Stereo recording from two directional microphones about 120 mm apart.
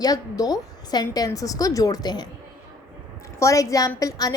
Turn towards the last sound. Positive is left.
turn(degrees=30)  # may be behind; listen again after turning